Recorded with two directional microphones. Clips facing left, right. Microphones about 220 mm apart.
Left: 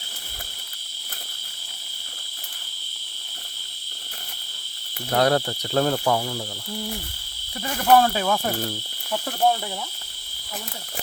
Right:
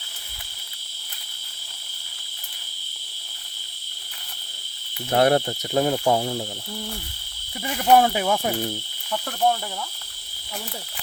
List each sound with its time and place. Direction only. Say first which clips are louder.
5.1 s speech: right 2 dB; 20° right (ahead or behind)
6.1 s speech: right 2 dB; 30° right (ahead or behind)
7.9 s cricket: even; 15° right (ahead or behind)